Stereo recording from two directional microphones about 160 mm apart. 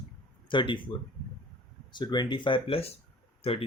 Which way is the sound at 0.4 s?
30° left (ahead or behind).